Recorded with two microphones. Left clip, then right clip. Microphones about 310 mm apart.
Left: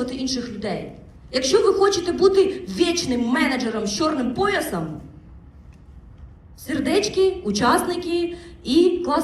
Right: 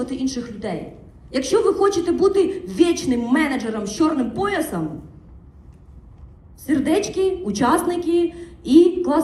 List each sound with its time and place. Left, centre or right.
0.0 s a woman's voice: right
6.6 s a man's voice: right